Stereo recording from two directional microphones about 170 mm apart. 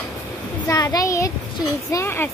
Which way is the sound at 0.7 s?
20° left (ahead or behind).